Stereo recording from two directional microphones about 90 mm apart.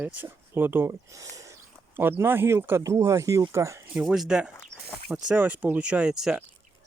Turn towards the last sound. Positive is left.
turn(degrees=-5)  # may be behind; listen again after turning